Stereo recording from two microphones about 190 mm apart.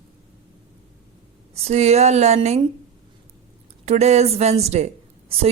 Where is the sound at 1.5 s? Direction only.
35° right (ahead or behind).